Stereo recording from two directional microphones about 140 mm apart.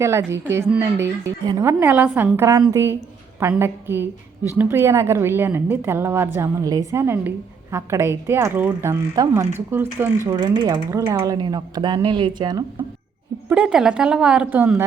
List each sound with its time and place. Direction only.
0.0 s a woman's voice: 20° right (ahead or behind)
10.3 s speech: 30° right (ahead or behind)
11.0 s speech: 20° right (ahead or behind)
13.5 s a woman's voice: 5° right (ahead or behind)